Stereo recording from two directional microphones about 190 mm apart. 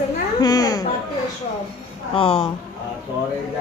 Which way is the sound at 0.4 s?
20° left (ahead or behind).